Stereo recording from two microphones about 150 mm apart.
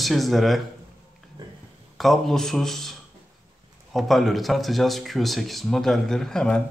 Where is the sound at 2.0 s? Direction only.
Centre (ahead or behind).